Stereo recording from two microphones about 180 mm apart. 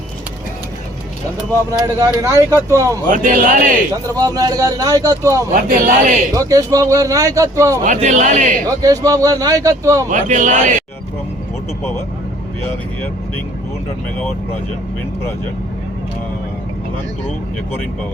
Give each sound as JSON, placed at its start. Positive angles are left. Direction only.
{"t": 1.4, "sound": "speech", "side_deg": -15}
{"t": 3.1, "sound": "speech", "side_deg": -45}
{"t": 3.9, "sound": "a man's voice", "side_deg": -20}
{"t": 5.6, "sound": "speech", "side_deg": -45}
{"t": 6.3, "sound": "speech", "side_deg": -20}
{"t": 7.9, "sound": "speech", "side_deg": -45}
{"t": 8.8, "sound": "a man's voice", "side_deg": -20}
{"t": 10.1, "sound": "speech", "side_deg": -45}